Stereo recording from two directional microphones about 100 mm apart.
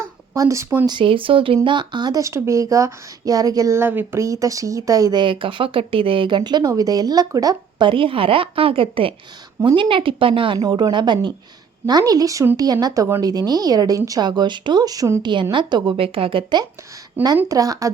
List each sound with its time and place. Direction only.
0.0 s a sound: 30° right (ahead or behind)
0.9 s a woman's voice: 55° right (ahead or behind)
1.6 s speech: 50° right (ahead or behind)
3.8 s speech: 20° right (ahead or behind)
4.2 s speech: 35° right (ahead or behind)
5.2 s speech: 60° right (ahead or behind); by 7.9 s 40° right (ahead or behind)
7.9 s a woman's voice: 60° right (ahead or behind)
10.6 s speech: 40° right (ahead or behind)
15.2 s a woman's voice: 50° right (ahead or behind)
17.2 s speech: 20° right (ahead or behind)
17.5 s speech: 35° right (ahead or behind)